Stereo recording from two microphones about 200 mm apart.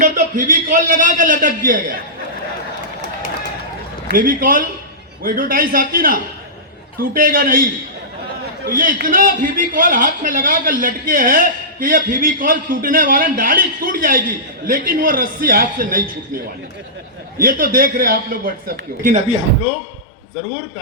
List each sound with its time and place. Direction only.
0.0 s a man's voice: 40° right (ahead or behind)
4.1 s a man's voice: 45° right (ahead or behind)
17.4 s a man's voice: 45° right (ahead or behind)